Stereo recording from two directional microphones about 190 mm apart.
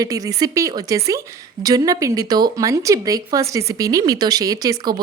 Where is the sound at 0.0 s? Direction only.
20° right (ahead or behind).